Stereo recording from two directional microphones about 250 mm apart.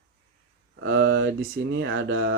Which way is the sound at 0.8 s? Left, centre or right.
Right.